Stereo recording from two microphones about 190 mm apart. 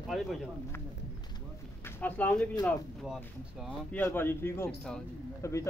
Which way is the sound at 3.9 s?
10° left (ahead or behind).